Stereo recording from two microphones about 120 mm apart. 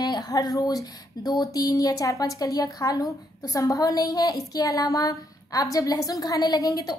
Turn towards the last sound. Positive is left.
turn(degrees=30)  # may be behind; listen again after turning